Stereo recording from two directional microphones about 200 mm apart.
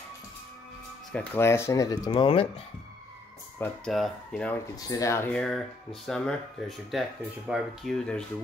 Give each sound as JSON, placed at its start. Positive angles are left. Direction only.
{"t": 1.1, "sound": "speech", "side_deg": 10}
{"t": 2.0, "sound": "speech", "side_deg": 25}
{"t": 3.5, "sound": "speech", "side_deg": 5}
{"t": 4.7, "sound": "speech", "side_deg": 20}